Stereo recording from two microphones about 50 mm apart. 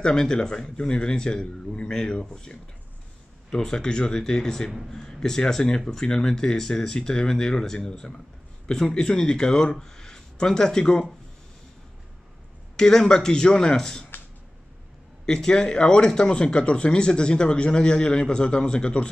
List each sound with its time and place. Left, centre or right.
0.0 s speech: centre
12.7 s speech: centre
15.2 s speech: centre